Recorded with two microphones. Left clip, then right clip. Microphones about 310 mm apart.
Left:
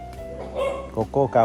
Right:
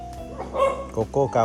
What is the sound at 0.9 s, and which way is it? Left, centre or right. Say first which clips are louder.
Speech: left 2 dB; left.